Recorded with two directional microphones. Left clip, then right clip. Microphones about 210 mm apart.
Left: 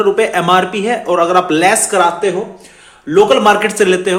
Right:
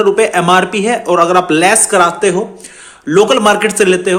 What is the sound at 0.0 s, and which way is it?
A man's voice, 15° right (ahead or behind).